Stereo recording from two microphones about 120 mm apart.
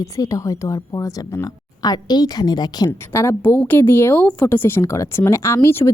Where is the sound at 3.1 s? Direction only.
20° left (ahead or behind).